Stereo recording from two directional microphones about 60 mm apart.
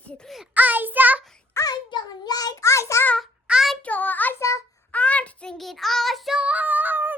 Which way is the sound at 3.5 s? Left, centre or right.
Centre.